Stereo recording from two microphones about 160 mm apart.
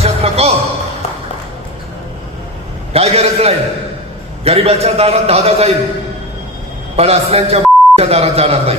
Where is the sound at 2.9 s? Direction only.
40° right (ahead or behind).